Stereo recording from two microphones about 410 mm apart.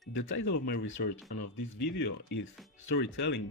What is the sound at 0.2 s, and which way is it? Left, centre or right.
Speech, left.